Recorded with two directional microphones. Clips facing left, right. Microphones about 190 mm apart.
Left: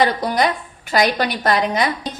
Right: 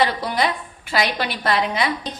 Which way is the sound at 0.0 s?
45° left (ahead or behind).